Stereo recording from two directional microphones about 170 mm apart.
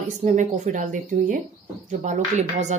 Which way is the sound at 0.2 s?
45° right (ahead or behind).